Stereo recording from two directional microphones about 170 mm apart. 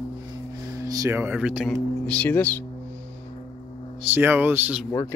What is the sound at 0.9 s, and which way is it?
Speech, 15° right (ahead or behind).